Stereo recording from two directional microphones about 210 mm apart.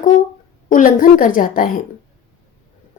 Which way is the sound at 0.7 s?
40° left (ahead or behind).